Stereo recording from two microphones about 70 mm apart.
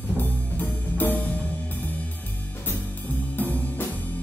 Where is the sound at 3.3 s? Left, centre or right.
Left.